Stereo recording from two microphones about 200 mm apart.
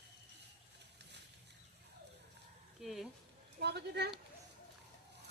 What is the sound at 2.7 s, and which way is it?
Speech, centre (ahead or behind).